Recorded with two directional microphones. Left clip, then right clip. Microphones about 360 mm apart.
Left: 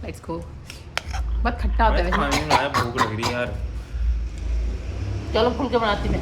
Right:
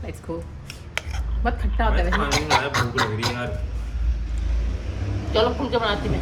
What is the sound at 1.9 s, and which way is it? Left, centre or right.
Speech, centre.